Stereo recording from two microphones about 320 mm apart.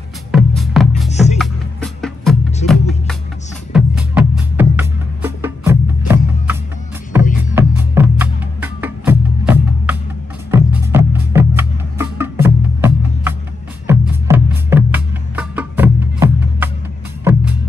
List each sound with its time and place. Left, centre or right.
0.3 s music: centre
1.1 s music: left
1.4 s music: centre